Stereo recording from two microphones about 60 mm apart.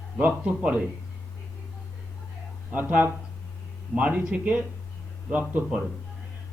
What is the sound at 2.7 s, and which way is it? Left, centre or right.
Speech, right.